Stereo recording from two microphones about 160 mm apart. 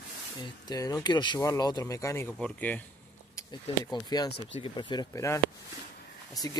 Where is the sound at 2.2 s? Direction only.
5° left (ahead or behind).